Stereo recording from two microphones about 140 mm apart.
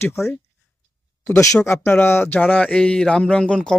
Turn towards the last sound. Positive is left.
turn(degrees=5)  # may be behind; listen again after turning